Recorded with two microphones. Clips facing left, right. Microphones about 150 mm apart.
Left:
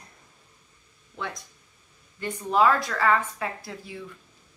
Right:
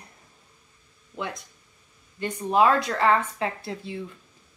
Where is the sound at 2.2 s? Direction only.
20° right (ahead or behind).